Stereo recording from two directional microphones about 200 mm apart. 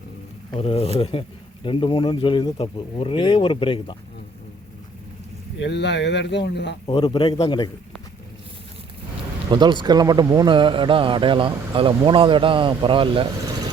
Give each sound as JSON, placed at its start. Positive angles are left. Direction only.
{"t": 0.5, "sound": "speech", "side_deg": 30}
{"t": 5.5, "sound": "speech", "side_deg": 60}
{"t": 6.8, "sound": "speech", "side_deg": 25}
{"t": 9.5, "sound": "speech", "side_deg": -20}